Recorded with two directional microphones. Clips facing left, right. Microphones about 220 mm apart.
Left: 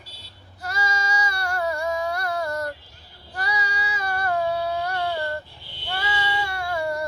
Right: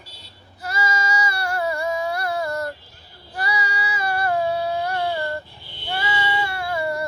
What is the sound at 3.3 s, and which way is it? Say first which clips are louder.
Child singing: right 2 dB; 5° right (ahead or behind).